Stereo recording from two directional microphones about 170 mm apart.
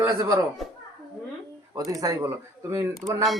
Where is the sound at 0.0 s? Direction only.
15° right (ahead or behind).